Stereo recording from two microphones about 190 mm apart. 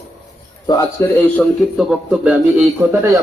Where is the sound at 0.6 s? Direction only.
20° left (ahead or behind).